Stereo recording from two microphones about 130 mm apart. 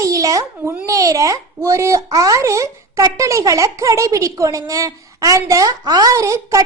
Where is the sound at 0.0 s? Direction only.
25° right (ahead or behind).